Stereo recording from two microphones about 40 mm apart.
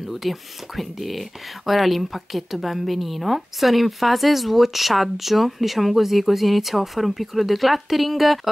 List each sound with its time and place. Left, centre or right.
0.1 s a woman's voice: centre